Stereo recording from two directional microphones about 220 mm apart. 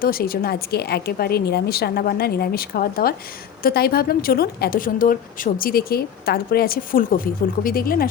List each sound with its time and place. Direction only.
0.0 s a woman's voice: 40° left (ahead or behind)